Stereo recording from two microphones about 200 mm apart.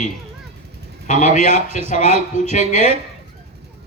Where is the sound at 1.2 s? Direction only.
35° left (ahead or behind).